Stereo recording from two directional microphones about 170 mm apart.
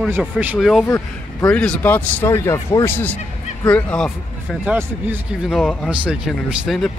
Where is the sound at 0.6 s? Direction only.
Centre (ahead or behind).